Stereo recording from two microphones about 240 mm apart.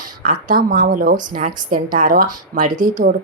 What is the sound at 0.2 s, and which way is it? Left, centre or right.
Speech, right.